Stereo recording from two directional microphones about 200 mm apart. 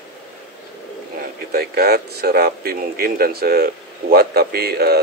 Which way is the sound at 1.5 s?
50° right (ahead or behind).